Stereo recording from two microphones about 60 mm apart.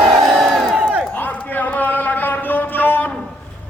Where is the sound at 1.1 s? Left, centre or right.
Left.